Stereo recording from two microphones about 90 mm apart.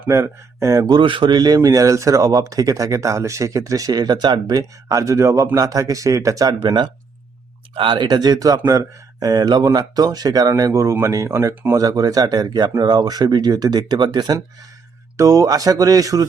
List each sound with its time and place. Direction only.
0.1 s speech: 35° right (ahead or behind)
0.9 s speech: 65° right (ahead or behind)
7.8 s speech: 65° right (ahead or behind)
8.0 s speech: 45° right (ahead or behind)
15.1 s speech: 40° right (ahead or behind)